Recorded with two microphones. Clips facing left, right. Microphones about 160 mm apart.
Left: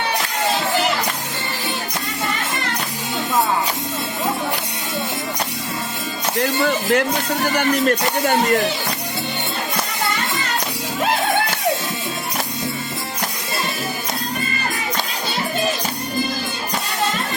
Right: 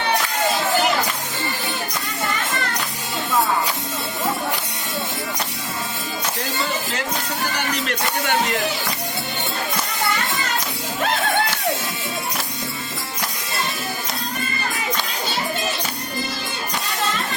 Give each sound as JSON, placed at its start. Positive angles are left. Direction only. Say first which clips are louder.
{"t": 6.4, "sound": "music", "louder": "left 9 dB", "side_deg": 60}
{"t": 7.5, "sound": "speech", "louder": "left 8 dB", "side_deg": 45}